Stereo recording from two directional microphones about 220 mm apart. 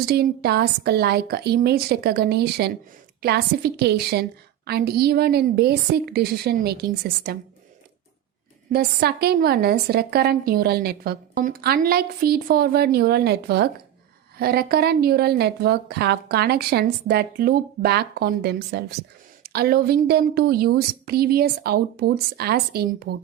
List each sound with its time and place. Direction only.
0.0 s a woman's voice: 45° right (ahead or behind)
8.7 s a woman's voice: 45° right (ahead or behind)